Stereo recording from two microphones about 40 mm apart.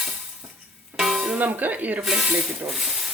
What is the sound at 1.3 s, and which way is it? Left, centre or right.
Speech, right.